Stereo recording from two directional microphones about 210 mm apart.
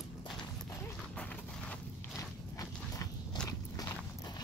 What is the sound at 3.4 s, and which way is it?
Biting, 20° left (ahead or behind).